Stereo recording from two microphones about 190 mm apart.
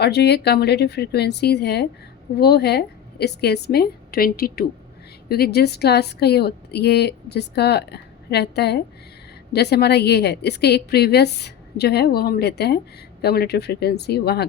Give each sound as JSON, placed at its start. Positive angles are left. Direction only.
{"t": 0.0, "sound": "speech", "side_deg": 60}